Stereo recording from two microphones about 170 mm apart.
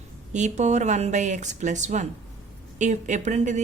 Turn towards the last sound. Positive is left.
turn(degrees=-45)  # may be behind; listen again after turning